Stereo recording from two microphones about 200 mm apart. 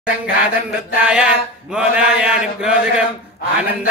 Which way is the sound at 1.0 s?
5° right (ahead or behind).